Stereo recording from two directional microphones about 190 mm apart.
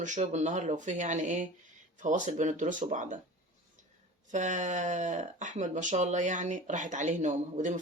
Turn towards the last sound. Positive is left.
turn(degrees=-40)  # may be behind; listen again after turning